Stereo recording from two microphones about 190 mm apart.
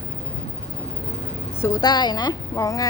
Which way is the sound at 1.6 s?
20° left (ahead or behind).